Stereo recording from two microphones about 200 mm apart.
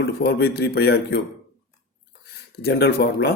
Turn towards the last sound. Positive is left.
turn(degrees=55)  # may be behind; listen again after turning